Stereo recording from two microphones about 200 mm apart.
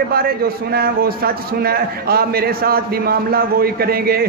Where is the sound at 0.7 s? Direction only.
50° right (ahead or behind).